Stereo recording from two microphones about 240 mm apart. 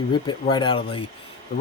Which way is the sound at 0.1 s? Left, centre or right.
Centre.